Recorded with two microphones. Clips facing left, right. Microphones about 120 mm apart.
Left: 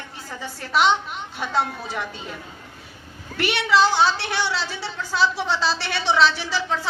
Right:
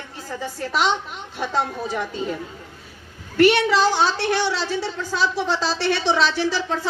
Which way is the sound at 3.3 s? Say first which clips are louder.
Right 4 dB; 40° right (ahead or behind).